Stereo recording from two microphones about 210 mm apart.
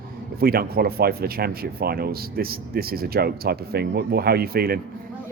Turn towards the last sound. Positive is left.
turn(degrees=-45)  # may be behind; listen again after turning